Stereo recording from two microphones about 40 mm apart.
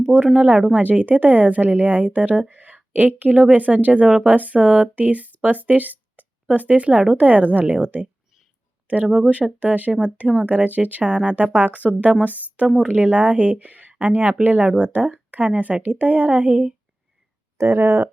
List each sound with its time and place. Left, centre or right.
0.0 s a woman's voice: right
2.5 s a sound: right
2.9 s a woman's voice: right
9.0 s speech: centre
9.3 s a woman's voice: right
17.7 s speech: right